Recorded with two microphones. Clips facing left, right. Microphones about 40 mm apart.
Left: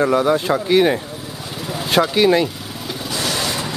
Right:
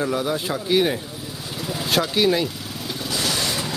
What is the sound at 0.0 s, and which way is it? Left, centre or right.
Speech, centre.